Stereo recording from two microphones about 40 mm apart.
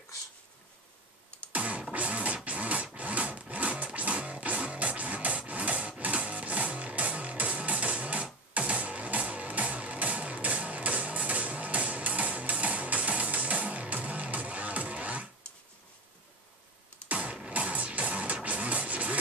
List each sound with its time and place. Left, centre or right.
1.5 s music: right
17.1 s music: right